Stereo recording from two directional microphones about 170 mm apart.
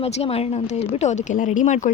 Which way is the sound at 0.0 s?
35° left (ahead or behind).